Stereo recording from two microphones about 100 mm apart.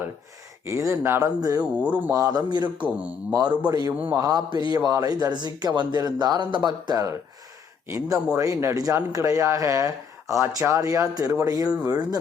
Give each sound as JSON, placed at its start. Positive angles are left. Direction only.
{"t": 0.6, "sound": "speech", "side_deg": -30}
{"t": 1.4, "sound": "speech", "side_deg": -35}
{"t": 1.8, "sound": "a man's voice", "side_deg": -15}
{"t": 2.1, "sound": "speech", "side_deg": -40}
{"t": 2.8, "sound": "a man's voice", "side_deg": -15}
{"t": 3.7, "sound": "speech", "side_deg": -40}
{"t": 7.9, "sound": "speech", "side_deg": -25}